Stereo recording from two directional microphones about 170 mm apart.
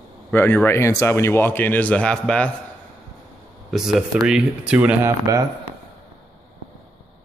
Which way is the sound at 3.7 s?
Centre (ahead or behind).